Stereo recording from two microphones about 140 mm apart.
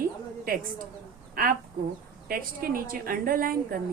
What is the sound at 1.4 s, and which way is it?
A woman's voice, 90° right.